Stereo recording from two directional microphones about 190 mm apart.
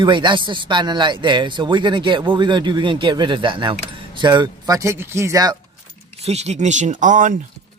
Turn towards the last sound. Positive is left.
turn(degrees=-40)  # may be behind; listen again after turning